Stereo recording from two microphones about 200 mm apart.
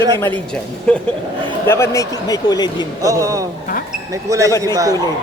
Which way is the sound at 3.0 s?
15° right (ahead or behind).